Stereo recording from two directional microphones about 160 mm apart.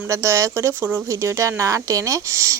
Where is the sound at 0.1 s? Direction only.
20° right (ahead or behind).